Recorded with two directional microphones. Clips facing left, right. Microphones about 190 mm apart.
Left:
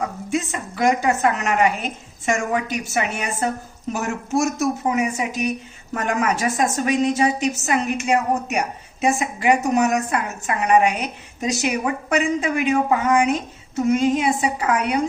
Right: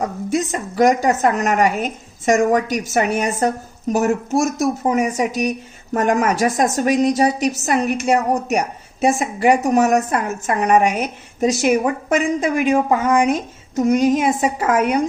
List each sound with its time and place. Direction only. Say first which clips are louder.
0.0 s a woman's voice: right 4 dB; 40° right (ahead or behind)